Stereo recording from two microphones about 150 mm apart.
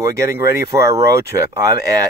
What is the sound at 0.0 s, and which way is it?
Speech, 20° right (ahead or behind).